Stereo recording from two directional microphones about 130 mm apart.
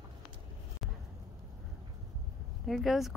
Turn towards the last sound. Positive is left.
turn(degrees=0)  # may be behind; listen again after turning